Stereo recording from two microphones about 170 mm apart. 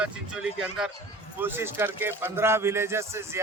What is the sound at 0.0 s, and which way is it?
Speech, 5° right (ahead or behind).